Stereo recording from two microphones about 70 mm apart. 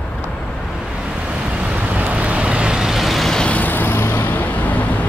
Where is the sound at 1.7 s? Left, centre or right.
Centre.